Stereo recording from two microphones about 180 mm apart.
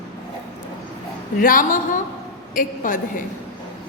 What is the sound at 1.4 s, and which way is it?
A woman's voice, 50° left (ahead or behind).